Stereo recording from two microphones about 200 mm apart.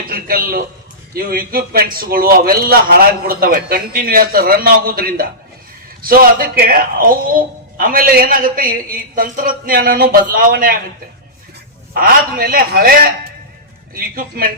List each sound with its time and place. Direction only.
0.1 s a man's voice: 45° right (ahead or behind)
11.9 s a man's voice: 45° right (ahead or behind)